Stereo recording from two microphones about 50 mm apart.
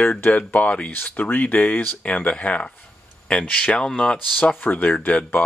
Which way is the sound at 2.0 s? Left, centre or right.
Left.